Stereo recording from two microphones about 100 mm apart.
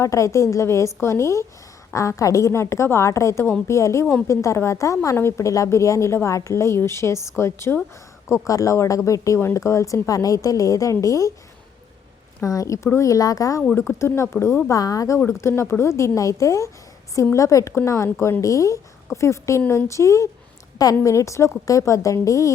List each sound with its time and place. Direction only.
0.0 s a woman's voice: 30° left (ahead or behind)
12.4 s speech: 35° left (ahead or behind)
13.6 s a woman's voice: 25° left (ahead or behind)